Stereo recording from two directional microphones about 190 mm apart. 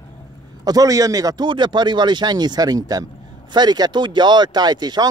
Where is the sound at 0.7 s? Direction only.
20° right (ahead or behind).